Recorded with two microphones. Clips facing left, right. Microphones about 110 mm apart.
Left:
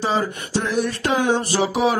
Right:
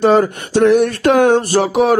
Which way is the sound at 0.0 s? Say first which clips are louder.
Right 10 dB; 55° right (ahead or behind).